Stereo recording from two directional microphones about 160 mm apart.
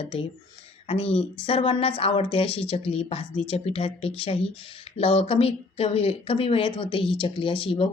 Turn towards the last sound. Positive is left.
turn(degrees=35)  # may be behind; listen again after turning